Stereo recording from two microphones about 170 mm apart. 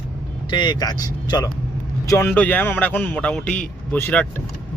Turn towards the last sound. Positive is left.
turn(degrees=10)  # may be behind; listen again after turning